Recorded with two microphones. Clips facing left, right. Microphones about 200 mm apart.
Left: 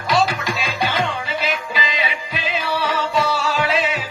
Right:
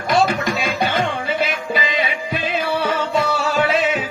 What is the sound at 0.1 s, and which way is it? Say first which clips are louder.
Music: right 2 dB; 55° right (ahead or behind).